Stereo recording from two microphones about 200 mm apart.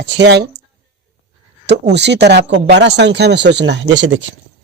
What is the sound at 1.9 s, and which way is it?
Speech, 60° right (ahead or behind).